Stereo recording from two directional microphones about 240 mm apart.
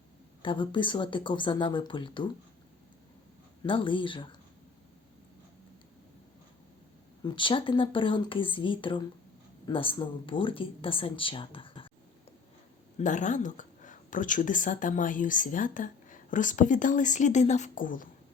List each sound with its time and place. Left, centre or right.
0.4 s speech: centre
3.6 s speech: left
7.3 s speech: left
13.0 s a woman's voice: left